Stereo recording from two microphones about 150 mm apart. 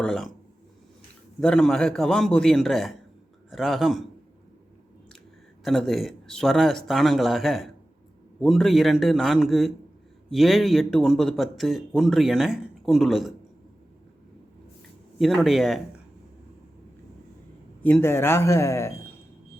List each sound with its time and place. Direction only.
0.0 s speech: 5° left (ahead or behind)
1.4 s speech: 5° left (ahead or behind)
5.6 s speech: centre (ahead or behind)
15.2 s speech: centre (ahead or behind)
17.8 s a man's voice: 15° left (ahead or behind)